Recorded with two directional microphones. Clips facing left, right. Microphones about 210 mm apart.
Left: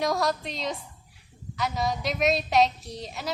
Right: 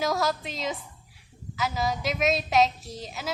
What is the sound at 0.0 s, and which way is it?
A woman's voice, centre (ahead or behind).